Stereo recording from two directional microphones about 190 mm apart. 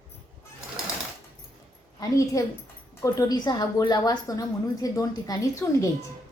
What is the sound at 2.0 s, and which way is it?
A woman's voice, 15° left (ahead or behind).